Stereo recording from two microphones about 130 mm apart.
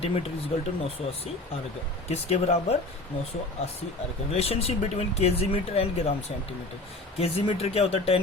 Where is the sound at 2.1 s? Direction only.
55° left (ahead or behind).